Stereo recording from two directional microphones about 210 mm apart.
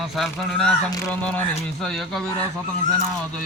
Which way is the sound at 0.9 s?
15° left (ahead or behind).